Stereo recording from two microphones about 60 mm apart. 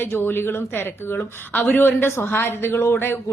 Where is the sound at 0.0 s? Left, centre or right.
Left.